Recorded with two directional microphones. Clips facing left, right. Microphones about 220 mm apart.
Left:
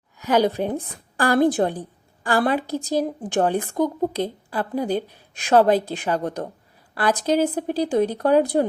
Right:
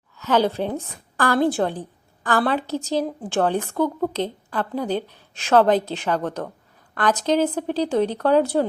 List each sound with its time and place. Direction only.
0.2 s a woman's voice: 15° left (ahead or behind)